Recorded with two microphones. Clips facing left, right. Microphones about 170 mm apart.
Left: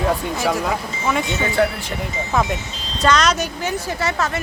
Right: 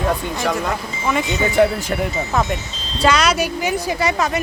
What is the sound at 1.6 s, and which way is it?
Speech, 20° right (ahead or behind).